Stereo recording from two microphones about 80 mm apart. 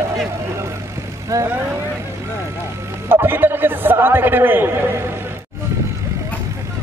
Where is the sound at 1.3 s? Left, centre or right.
Right.